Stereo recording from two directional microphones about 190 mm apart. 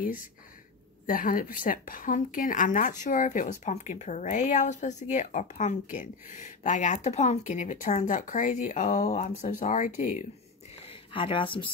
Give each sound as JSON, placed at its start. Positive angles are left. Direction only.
{"t": 1.0, "sound": "a woman's voice", "side_deg": 45}
{"t": 10.9, "sound": "a woman's voice", "side_deg": 30}